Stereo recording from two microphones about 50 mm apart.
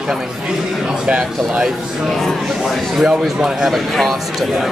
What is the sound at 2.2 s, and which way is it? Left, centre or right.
Speech, centre.